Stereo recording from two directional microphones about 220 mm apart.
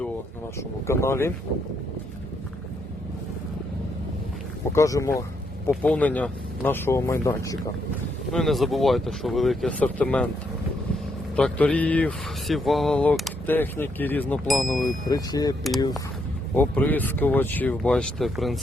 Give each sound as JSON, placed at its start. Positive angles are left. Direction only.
{"t": 0.9, "sound": "speech", "side_deg": 10}
{"t": 4.7, "sound": "speech", "side_deg": 15}
{"t": 8.3, "sound": "speech", "side_deg": 0}
{"t": 11.3, "sound": "speech", "side_deg": 5}
{"t": 15.0, "sound": "speech", "side_deg": 15}
{"t": 16.6, "sound": "speech", "side_deg": 5}